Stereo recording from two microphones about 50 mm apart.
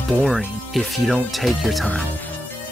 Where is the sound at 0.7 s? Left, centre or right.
Centre.